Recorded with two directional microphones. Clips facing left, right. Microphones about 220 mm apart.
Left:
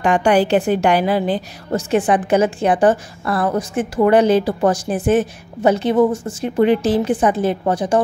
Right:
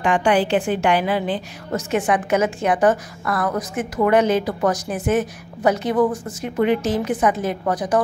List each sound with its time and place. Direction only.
0.0 s a woman's voice: 40° left (ahead or behind)